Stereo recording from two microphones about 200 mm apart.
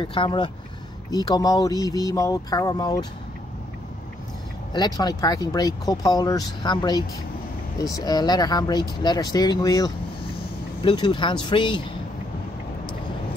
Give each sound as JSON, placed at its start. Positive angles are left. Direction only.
{"t": 0.0, "sound": "speech", "side_deg": 25}
{"t": 4.7, "sound": "speech", "side_deg": 20}